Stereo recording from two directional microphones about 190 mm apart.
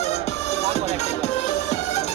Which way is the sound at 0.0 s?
35° left (ahead or behind).